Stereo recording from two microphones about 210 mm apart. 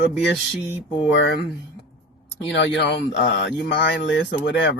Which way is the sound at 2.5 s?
55° left (ahead or behind).